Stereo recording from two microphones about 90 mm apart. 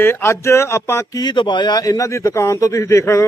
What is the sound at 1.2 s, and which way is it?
Speech, 55° left (ahead or behind).